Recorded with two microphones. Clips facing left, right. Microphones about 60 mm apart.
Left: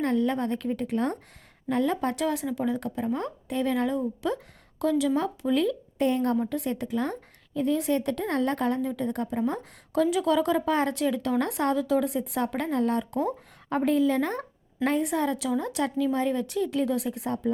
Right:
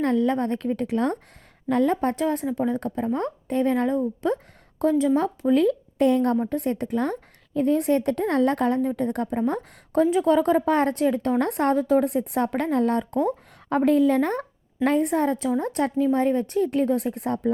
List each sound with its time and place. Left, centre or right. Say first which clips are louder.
0.0 s a woman's voice: right 3 dB; right
6.3 s a woman's voice: right 3 dB; right
9.5 s a woman's voice: right 4 dB; right
13.1 s a sound: right 4 dB; right
13.7 s a woman's voice: right 4 dB; right